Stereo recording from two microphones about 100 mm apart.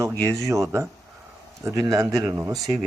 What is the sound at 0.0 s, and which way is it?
A man's voice, 30° right (ahead or behind).